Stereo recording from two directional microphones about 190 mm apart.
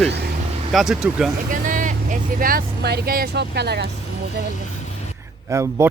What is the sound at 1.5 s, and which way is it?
Speech, 45° right (ahead or behind).